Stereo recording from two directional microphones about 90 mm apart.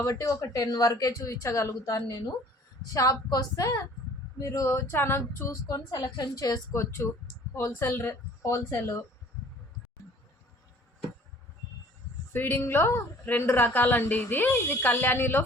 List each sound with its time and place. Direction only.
0.0 s speech: 40° left (ahead or behind)
2.0 s a woman's voice: 50° left (ahead or behind); by 5.2 s 25° left (ahead or behind)
5.6 s a woman's voice: 45° left (ahead or behind)
6.7 s speech: 30° left (ahead or behind)
12.3 s a woman's voice: 25° left (ahead or behind)